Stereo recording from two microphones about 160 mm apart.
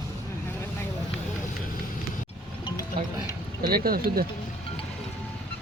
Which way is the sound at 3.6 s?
70° right (ahead or behind).